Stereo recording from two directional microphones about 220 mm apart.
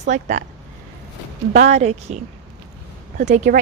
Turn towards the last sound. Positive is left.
turn(degrees=-35)  # may be behind; listen again after turning